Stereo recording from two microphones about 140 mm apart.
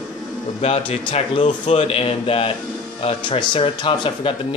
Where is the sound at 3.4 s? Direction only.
35° left (ahead or behind).